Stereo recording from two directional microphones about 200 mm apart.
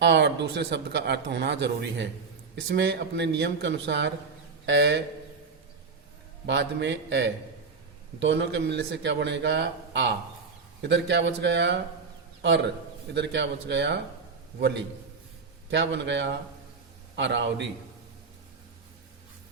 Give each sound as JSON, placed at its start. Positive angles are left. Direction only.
{"t": 0.0, "sound": "speech", "side_deg": -60}
{"t": 6.4, "sound": "a man's voice", "side_deg": -60}
{"t": 15.7, "sound": "speech", "side_deg": -60}